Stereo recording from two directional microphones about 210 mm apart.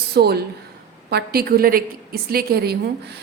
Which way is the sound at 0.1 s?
50° right (ahead or behind).